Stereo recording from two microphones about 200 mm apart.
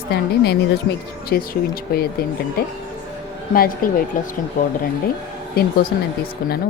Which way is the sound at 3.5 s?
45° left (ahead or behind).